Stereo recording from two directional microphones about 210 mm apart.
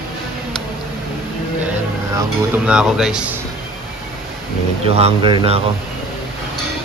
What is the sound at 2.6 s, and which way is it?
Speech, 5° right (ahead or behind).